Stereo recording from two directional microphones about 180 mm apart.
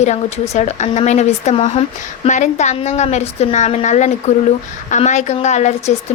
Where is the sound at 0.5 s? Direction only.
40° left (ahead or behind).